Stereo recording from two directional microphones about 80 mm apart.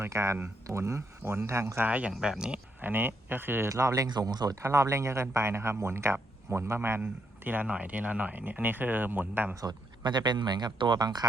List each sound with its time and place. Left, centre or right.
0.0 s speech: right
1.9 s speech: centre
2.8 s speech: right
3.7 s speech: right
4.0 s speech: right
4.6 s speech: right
9.6 s speech: right